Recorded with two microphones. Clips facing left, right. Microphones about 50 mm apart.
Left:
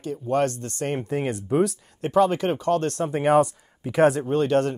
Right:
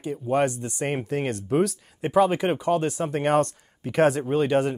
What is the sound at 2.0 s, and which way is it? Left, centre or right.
Speech, centre.